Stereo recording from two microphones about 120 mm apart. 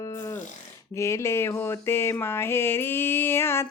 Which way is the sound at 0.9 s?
25° left (ahead or behind).